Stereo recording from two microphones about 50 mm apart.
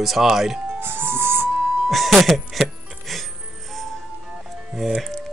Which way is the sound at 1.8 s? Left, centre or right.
Centre.